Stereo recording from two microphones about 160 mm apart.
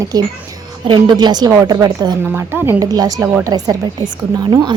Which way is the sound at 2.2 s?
15° right (ahead or behind).